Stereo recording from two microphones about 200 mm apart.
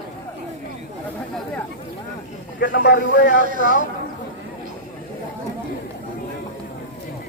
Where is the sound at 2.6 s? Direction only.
60° left (ahead or behind).